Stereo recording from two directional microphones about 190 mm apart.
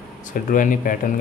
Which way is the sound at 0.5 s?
45° left (ahead or behind).